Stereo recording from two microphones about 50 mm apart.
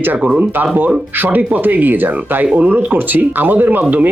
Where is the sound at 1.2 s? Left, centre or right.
Right.